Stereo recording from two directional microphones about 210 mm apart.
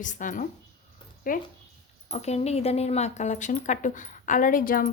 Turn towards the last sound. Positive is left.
turn(degrees=40)  # may be behind; listen again after turning